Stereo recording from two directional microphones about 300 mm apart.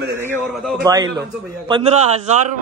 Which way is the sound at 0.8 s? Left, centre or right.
Centre.